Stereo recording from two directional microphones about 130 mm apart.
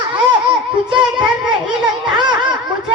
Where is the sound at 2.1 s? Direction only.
35° right (ahead or behind).